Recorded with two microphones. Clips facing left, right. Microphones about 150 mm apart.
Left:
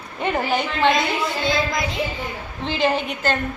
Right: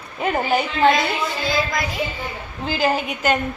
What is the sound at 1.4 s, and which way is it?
Speech, 25° left (ahead or behind).